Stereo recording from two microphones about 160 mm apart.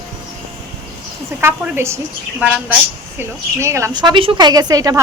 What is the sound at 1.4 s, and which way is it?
Speech, 15° right (ahead or behind).